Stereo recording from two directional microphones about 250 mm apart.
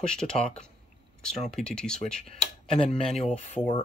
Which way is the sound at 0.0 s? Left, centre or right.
Centre.